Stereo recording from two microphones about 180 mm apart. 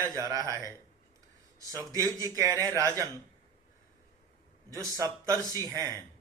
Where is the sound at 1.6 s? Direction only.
20° right (ahead or behind).